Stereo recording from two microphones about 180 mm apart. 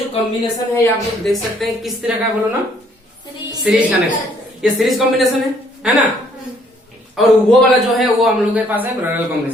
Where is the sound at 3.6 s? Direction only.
5° right (ahead or behind).